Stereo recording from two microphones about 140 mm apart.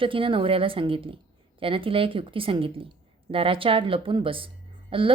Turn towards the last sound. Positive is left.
turn(degrees=-40)  # may be behind; listen again after turning